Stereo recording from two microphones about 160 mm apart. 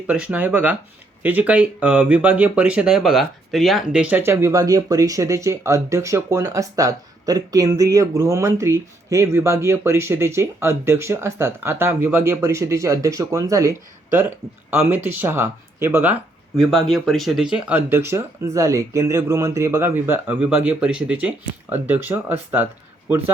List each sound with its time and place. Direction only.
0.1 s speech: 10° right (ahead or behind)
16.6 s speech: centre (ahead or behind)